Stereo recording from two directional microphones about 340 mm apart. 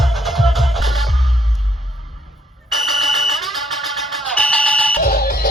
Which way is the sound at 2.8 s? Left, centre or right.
Centre.